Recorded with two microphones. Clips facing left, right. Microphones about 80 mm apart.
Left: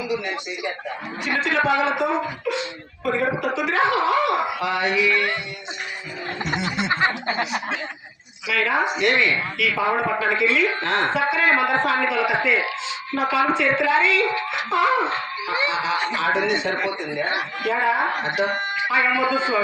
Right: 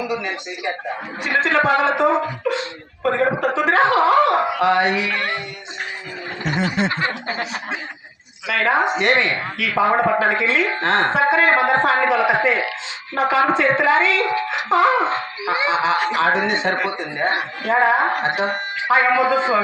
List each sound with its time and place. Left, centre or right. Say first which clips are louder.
1.2 s speech: right 4 dB; right
6.4 s speech: right 5 dB; right
8.4 s speech: right 3 dB; right
15.5 s music: right 4 dB; centre
16.2 s a man's voice: right 3 dB; right